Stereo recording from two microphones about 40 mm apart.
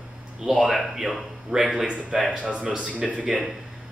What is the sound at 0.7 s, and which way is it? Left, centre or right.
Speech, centre.